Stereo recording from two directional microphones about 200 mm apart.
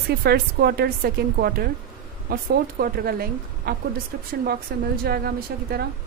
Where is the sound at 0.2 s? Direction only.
50° right (ahead or behind).